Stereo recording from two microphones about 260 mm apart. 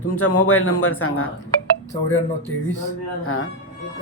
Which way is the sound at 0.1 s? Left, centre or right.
Left.